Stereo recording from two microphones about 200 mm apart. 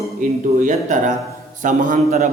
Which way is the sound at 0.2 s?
40° right (ahead or behind).